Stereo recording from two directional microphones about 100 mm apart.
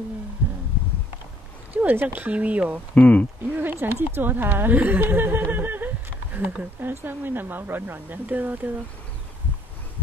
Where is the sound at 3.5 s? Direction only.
20° right (ahead or behind).